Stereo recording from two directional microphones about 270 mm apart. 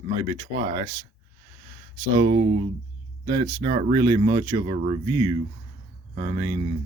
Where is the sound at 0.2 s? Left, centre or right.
Centre.